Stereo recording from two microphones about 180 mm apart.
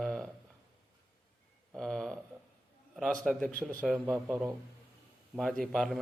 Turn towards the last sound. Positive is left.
turn(degrees=0)  # may be behind; listen again after turning